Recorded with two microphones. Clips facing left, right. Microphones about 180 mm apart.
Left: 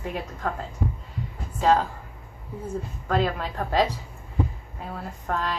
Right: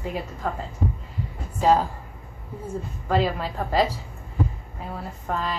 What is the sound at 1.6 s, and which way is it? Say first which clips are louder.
Speech: right 1 dB; 10° right (ahead or behind).